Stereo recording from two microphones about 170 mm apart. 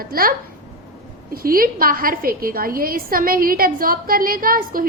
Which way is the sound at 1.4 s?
60° right (ahead or behind).